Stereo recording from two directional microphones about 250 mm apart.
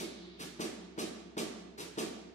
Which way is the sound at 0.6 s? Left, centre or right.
Left.